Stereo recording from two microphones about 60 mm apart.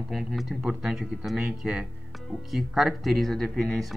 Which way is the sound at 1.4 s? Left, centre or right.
Centre.